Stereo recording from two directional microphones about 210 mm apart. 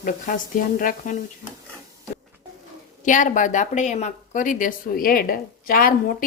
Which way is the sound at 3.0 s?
40° left (ahead or behind).